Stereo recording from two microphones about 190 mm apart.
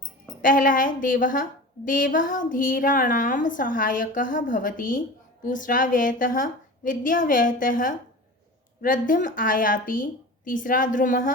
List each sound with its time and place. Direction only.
0.4 s a woman's voice: 45° left (ahead or behind)